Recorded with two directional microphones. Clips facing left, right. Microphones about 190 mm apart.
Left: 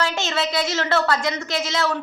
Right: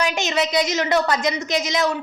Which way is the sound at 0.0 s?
15° right (ahead or behind).